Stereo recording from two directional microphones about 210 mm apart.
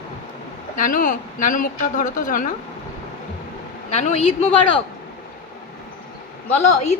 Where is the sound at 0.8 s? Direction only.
40° left (ahead or behind).